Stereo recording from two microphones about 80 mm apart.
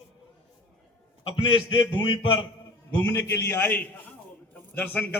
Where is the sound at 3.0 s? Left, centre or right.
Left.